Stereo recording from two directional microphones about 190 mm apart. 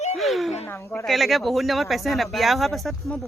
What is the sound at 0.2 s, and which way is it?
Speech, centre (ahead or behind).